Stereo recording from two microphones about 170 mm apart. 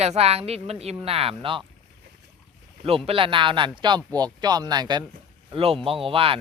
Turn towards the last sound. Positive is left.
turn(degrees=-30)  # may be behind; listen again after turning